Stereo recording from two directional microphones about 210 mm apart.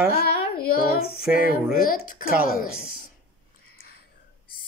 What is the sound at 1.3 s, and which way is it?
Speech, 45° left (ahead or behind).